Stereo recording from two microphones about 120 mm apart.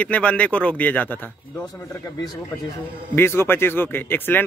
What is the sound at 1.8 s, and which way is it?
Speech, 20° left (ahead or behind).